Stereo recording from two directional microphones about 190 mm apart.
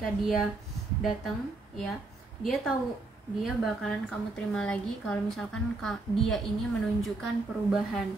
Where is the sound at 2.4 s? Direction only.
Centre (ahead or behind).